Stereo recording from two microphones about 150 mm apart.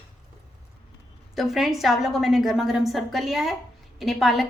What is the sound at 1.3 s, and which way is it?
A woman's voice, centre (ahead or behind).